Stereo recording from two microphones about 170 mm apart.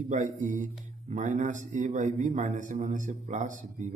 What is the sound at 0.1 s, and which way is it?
A man's voice, 45° right (ahead or behind).